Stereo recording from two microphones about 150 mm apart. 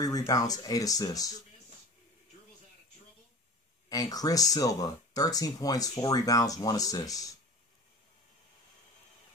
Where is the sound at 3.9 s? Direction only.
25° left (ahead or behind).